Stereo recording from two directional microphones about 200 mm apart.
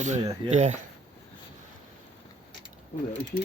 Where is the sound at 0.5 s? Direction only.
35° right (ahead or behind).